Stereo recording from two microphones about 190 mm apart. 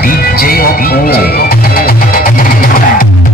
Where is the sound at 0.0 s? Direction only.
50° left (ahead or behind).